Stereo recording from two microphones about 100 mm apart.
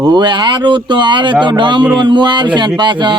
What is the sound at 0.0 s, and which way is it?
Speech, 50° right (ahead or behind).